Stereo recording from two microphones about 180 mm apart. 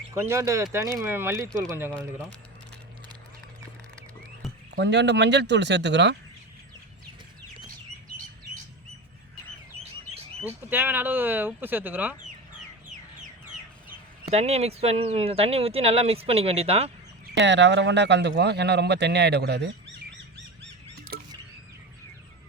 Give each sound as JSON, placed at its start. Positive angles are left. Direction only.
{"t": 0.1, "sound": "speech", "side_deg": -15}
{"t": 4.4, "sound": "a sound", "side_deg": 0}
{"t": 4.8, "sound": "speech", "side_deg": -70}
{"t": 10.4, "sound": "speech", "side_deg": -10}
{"t": 14.3, "sound": "speech", "side_deg": -35}
{"t": 17.4, "sound": "speech", "side_deg": -80}
{"t": 21.1, "sound": "a sound", "side_deg": -55}